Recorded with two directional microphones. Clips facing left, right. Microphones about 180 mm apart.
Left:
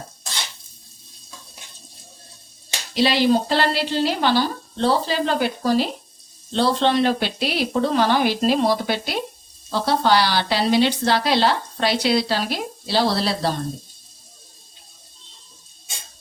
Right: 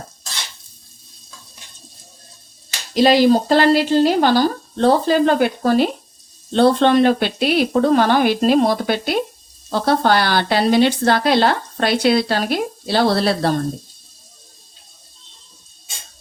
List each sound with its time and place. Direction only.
2.9 s speech: 45° right (ahead or behind)